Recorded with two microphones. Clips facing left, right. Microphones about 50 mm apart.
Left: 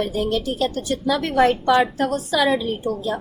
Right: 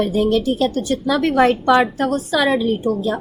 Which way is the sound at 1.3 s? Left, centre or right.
Right.